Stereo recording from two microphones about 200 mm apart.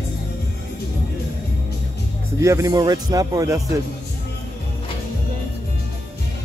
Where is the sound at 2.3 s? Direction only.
15° right (ahead or behind).